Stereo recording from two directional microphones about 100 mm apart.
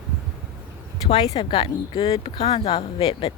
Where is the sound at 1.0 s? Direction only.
80° left.